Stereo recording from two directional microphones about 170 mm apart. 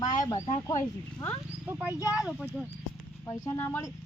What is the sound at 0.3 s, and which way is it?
Speech, 40° left (ahead or behind).